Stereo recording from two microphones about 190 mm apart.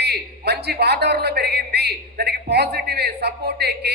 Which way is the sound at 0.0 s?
60° right (ahead or behind).